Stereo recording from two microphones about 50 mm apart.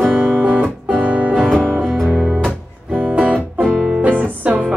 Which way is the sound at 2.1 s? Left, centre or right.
Centre.